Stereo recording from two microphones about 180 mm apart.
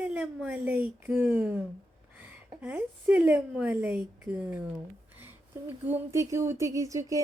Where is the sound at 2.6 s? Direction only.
10° right (ahead or behind).